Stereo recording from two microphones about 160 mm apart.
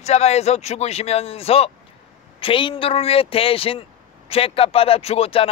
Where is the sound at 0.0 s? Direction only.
45° left (ahead or behind).